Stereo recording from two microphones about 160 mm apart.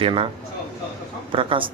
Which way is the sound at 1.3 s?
35° right (ahead or behind).